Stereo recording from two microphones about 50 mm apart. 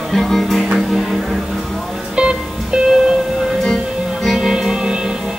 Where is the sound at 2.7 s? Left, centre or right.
Centre.